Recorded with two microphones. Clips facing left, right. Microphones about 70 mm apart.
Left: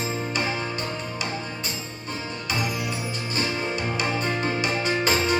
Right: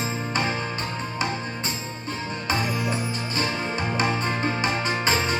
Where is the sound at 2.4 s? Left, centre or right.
Right.